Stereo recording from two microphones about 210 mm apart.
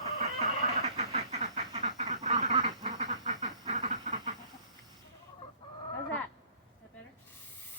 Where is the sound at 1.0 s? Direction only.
35° right (ahead or behind).